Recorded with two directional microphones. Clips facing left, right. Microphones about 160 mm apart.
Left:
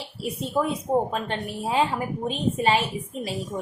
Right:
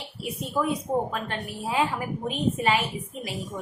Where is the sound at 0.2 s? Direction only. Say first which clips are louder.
Left 2 dB; 25° left (ahead or behind).